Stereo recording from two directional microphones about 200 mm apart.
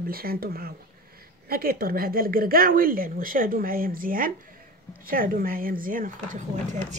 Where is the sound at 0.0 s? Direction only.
50° right (ahead or behind).